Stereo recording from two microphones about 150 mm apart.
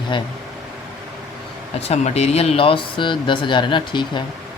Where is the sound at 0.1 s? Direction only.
30° left (ahead or behind).